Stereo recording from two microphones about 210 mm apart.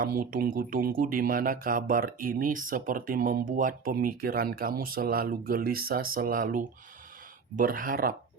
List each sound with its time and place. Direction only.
0.0 s speech: 40° right (ahead or behind)